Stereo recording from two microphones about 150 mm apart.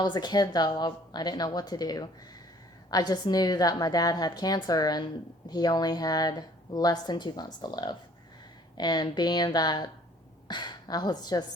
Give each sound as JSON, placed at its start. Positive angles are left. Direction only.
{"t": 0.0, "sound": "speech", "side_deg": 30}